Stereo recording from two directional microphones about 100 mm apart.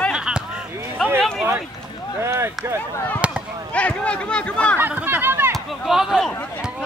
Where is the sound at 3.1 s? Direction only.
10° right (ahead or behind).